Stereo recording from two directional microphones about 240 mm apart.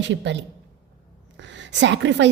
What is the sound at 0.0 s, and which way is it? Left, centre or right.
A woman's voice, right.